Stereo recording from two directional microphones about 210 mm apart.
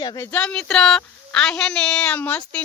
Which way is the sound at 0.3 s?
5° left (ahead or behind).